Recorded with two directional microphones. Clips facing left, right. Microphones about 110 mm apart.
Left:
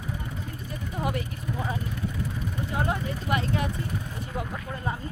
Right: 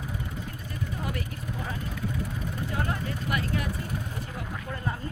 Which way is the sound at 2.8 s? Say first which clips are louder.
Left 3 dB; 20° left (ahead or behind).